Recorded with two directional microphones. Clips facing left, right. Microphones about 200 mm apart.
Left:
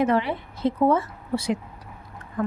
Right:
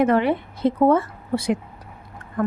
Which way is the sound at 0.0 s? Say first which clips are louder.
Right 4 dB; 55° right (ahead or behind).